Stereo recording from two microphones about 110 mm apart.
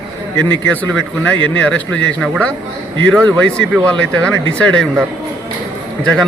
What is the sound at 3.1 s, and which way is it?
A man's voice, 5° left (ahead or behind).